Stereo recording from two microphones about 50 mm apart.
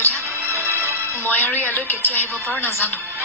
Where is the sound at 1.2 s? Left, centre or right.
Left.